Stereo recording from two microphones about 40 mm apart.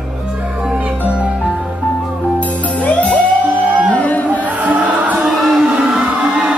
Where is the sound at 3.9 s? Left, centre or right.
Left.